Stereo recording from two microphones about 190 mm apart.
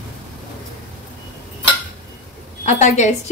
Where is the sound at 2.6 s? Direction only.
40° left (ahead or behind).